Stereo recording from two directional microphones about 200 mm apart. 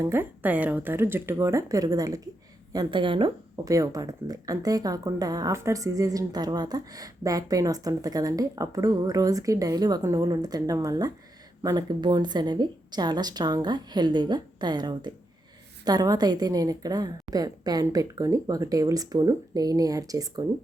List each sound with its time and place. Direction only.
0.0 s a woman's voice: 10° right (ahead or behind)